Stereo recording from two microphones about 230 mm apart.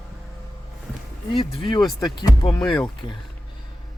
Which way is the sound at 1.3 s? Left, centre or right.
Left.